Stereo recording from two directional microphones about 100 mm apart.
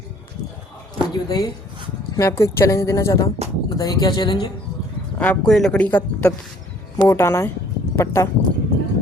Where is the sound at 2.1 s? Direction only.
30° left (ahead or behind).